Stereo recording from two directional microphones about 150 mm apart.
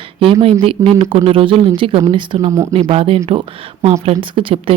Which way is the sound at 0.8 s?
15° right (ahead or behind).